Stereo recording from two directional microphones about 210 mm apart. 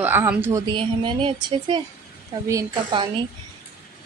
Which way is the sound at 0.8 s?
25° right (ahead or behind).